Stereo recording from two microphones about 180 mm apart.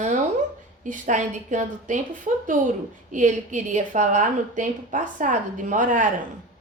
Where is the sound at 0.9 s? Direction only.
45° right (ahead or behind).